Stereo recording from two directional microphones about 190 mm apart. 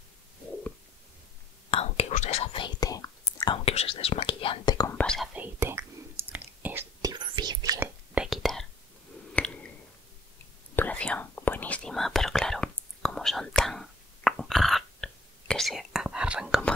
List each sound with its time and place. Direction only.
1.7 s whispering: 30° left (ahead or behind)
3.6 s speech: 30° left (ahead or behind)
4.9 s whispering: 5° left (ahead or behind)
5.3 s whispering: 10° right (ahead or behind)
7.8 s whispering: 5° right (ahead or behind)
9.3 s squish: 5° left (ahead or behind)
10.8 s whispering: 5° left (ahead or behind)